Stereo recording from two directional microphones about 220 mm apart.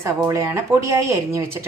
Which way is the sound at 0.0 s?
15° right (ahead or behind).